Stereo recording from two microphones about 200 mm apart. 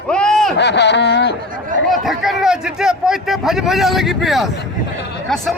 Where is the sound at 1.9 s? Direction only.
Centre (ahead or behind).